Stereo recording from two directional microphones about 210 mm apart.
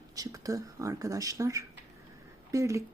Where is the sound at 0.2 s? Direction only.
15° right (ahead or behind).